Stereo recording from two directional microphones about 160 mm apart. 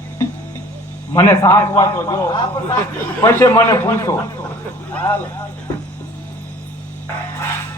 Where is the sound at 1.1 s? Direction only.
15° left (ahead or behind).